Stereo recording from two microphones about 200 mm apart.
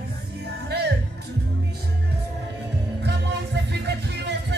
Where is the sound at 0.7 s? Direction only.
55° right (ahead or behind).